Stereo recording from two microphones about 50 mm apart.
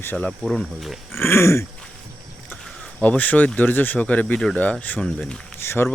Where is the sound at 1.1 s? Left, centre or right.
Left.